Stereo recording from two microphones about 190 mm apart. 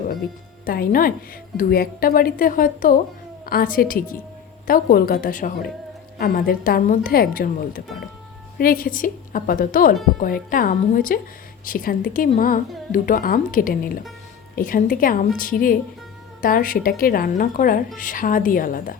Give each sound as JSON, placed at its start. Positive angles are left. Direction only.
{"t": 0.6, "sound": "a woman's voice", "side_deg": 50}